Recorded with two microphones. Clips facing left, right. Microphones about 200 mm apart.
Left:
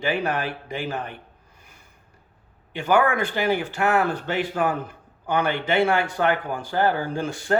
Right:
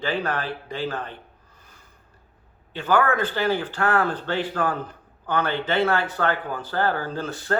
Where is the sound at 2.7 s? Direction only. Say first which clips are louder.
Left 1 dB; 10° left (ahead or behind).